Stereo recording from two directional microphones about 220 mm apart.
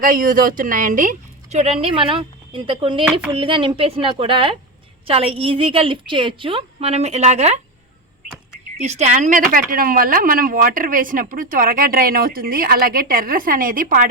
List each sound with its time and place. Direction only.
0.0 s a woman's voice: 40° right (ahead or behind)
8.8 s speech: 30° right (ahead or behind)